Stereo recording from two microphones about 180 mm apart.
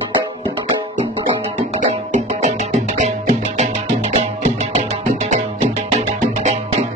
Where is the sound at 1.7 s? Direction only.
40° right (ahead or behind).